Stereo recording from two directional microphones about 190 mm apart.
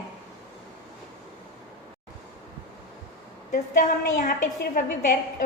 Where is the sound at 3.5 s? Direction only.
45° left (ahead or behind).